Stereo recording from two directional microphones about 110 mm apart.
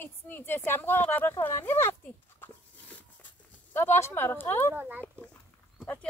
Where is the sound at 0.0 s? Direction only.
20° left (ahead or behind).